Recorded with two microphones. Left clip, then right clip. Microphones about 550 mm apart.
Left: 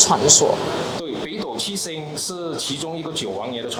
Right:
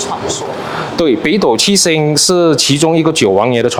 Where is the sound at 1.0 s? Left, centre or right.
Right.